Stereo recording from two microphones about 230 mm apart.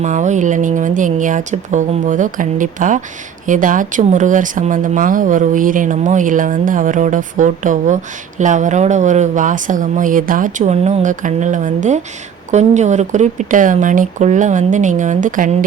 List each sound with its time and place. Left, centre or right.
0.0 s speech: right